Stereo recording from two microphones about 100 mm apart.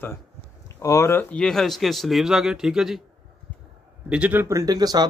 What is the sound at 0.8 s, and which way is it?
Speech, 30° left (ahead or behind).